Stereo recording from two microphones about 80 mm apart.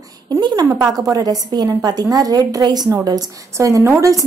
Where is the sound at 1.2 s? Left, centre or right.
Right.